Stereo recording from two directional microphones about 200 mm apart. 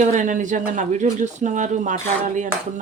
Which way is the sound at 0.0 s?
40° right (ahead or behind).